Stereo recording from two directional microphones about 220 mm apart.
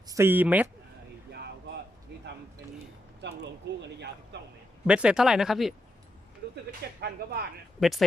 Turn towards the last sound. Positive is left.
turn(degrees=0)  # may be behind; listen again after turning